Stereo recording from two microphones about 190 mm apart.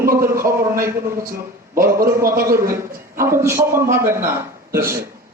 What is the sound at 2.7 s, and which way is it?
A man's voice, 15° right (ahead or behind).